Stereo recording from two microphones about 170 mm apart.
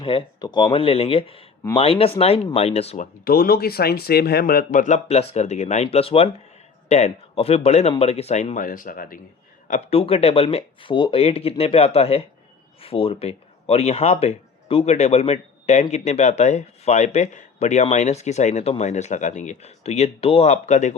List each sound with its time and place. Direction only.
0.0 s speech: 30° left (ahead or behind)
3.2 s speech: 60° left (ahead or behind)
9.6 s speech: 40° left (ahead or behind)